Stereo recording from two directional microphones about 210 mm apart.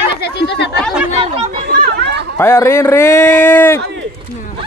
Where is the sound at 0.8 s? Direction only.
5° right (ahead or behind).